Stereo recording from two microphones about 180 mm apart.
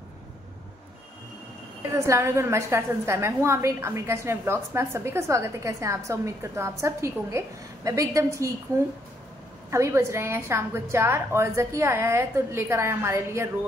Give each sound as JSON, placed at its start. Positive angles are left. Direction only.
{"t": 2.0, "sound": "a woman's voice", "side_deg": -15}
{"t": 9.7, "sound": "a woman's voice", "side_deg": -15}